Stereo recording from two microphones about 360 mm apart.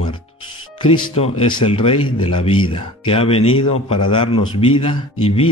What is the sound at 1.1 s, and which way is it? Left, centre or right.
Speech, centre.